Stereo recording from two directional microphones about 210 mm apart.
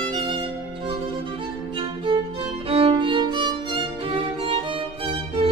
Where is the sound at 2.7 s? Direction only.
25° right (ahead or behind).